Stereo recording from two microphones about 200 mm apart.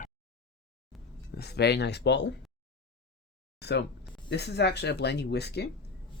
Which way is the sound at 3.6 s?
55° left (ahead or behind).